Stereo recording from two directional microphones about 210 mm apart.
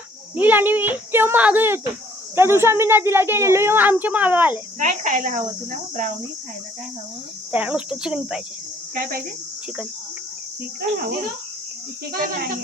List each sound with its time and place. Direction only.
0.3 s a woman's voice: 10° right (ahead or behind)
4.8 s speech: 35° right (ahead or behind)
7.5 s speech: 5° right (ahead or behind)
9.0 s speech: 45° right (ahead or behind)
10.8 s speech: 45° right (ahead or behind)
12.1 s speech: 45° right (ahead or behind)